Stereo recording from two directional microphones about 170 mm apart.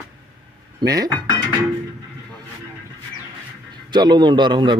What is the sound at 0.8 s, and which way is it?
Speech, 20° right (ahead or behind).